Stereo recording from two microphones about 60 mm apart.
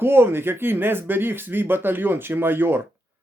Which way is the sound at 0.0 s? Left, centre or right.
Right.